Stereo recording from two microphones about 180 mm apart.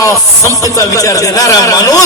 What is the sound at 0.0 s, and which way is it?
Speech, 15° left (ahead or behind).